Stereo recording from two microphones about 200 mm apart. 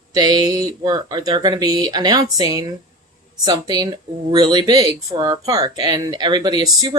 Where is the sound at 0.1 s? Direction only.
20° right (ahead or behind).